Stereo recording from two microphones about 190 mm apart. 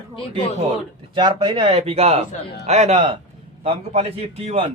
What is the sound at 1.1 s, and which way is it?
A man's voice, 25° right (ahead or behind).